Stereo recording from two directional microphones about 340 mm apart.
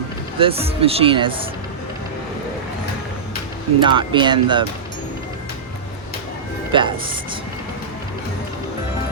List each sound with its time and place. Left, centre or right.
0.3 s speech: centre
3.8 s speech: centre
6.7 s speech: centre